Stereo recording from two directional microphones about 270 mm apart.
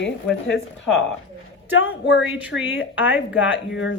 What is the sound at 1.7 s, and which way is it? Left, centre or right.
Speech, left.